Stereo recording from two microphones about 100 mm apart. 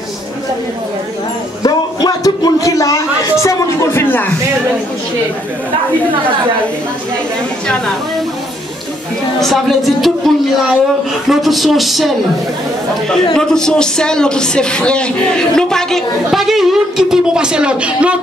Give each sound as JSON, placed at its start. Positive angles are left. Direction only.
{"t": 1.6, "sound": "a sound", "side_deg": 40}
{"t": 7.6, "sound": "a woman's voice", "side_deg": 10}
{"t": 9.4, "sound": "speech", "side_deg": 0}
{"t": 13.3, "sound": "speech", "side_deg": 5}